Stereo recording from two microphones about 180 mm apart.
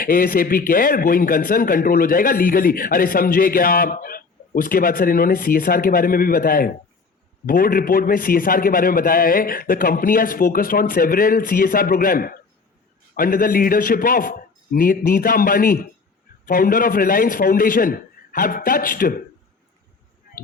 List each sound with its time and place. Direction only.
0.0 s a man's voice: 55° left (ahead or behind)